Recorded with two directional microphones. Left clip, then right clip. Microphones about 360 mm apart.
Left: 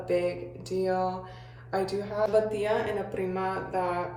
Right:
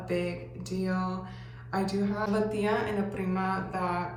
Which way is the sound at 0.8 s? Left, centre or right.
Centre.